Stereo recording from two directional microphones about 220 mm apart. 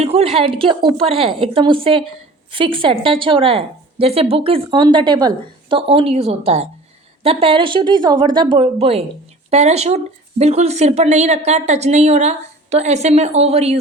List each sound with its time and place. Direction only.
0.0 s a woman's voice: 25° right (ahead or behind)